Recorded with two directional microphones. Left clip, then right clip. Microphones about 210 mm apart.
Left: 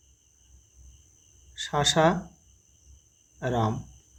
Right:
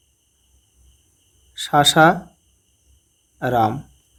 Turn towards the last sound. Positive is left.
turn(degrees=-35)  # may be behind; listen again after turning